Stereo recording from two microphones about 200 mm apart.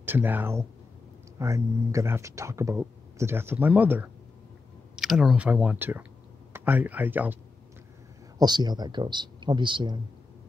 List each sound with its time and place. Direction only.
0.0 s speech: 10° right (ahead or behind)
8.4 s speech: 20° right (ahead or behind)